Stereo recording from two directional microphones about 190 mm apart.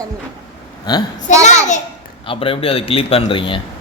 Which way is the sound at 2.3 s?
30° left (ahead or behind).